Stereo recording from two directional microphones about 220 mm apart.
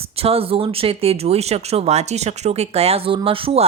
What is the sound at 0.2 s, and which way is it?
Speech, 25° right (ahead or behind).